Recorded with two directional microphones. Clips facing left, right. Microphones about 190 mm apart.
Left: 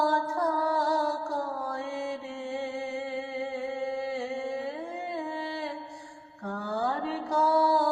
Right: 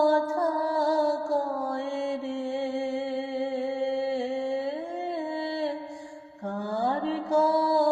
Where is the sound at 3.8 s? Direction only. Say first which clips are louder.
Right 4 dB; 30° right (ahead or behind).